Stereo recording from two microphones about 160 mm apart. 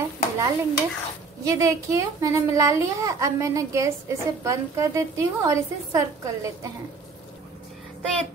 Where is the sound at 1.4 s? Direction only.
20° right (ahead or behind).